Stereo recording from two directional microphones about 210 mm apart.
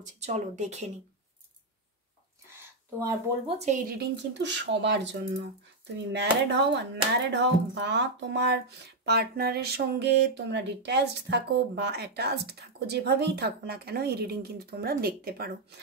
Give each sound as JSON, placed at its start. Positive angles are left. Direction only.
{"t": 0.0, "sound": "speech", "side_deg": -35}
{"t": 2.5, "sound": "a sound", "side_deg": -15}
{"t": 3.4, "sound": "speech", "side_deg": -30}
{"t": 4.3, "sound": "speech", "side_deg": -55}